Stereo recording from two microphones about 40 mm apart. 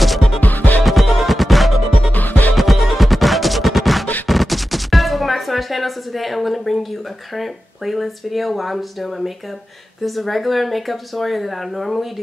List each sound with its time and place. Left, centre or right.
0.0 s music: centre
0.4 s music: left
0.8 s music: centre
2.1 s music: left
2.5 s music: centre
4.3 s a sound: centre
7.3 s speech: centre